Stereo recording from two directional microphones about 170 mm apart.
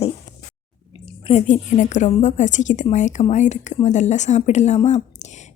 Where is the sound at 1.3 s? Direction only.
45° left (ahead or behind).